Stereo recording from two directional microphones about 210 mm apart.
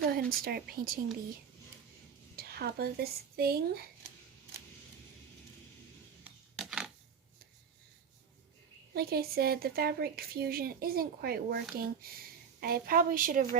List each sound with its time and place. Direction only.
0.0 s speech: 45° right (ahead or behind)
2.3 s speech: 50° right (ahead or behind)
6.6 s a sound: centre (ahead or behind)
9.0 s speech: 45° right (ahead or behind)